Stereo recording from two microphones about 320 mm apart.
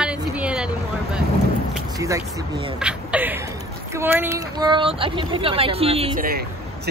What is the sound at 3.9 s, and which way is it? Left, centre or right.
Speech, centre.